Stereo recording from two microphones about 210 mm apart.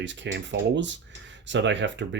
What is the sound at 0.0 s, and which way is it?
Speech, 60° right (ahead or behind).